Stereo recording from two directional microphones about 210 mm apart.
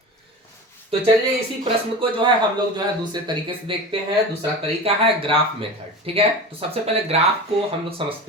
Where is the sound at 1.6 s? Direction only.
25° right (ahead or behind).